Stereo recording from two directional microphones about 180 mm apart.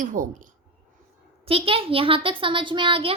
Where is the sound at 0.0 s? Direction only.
45° right (ahead or behind).